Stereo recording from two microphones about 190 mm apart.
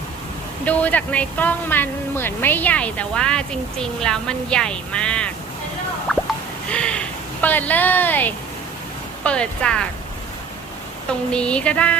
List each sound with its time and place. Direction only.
0.6 s speech: 10° left (ahead or behind)
6.1 s a sound: centre (ahead or behind)
6.7 s speech: 5° left (ahead or behind)
11.3 s speech: 5° left (ahead or behind)